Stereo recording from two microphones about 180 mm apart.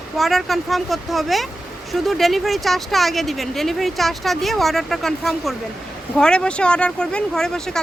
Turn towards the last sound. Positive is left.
turn(degrees=5)  # may be behind; listen again after turning